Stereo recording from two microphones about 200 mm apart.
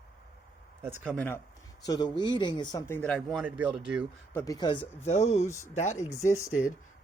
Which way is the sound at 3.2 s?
5° right (ahead or behind).